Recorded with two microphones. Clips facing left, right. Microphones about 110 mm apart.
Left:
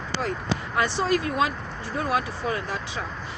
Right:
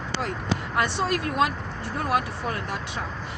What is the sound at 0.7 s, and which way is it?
Speech, 65° right (ahead or behind).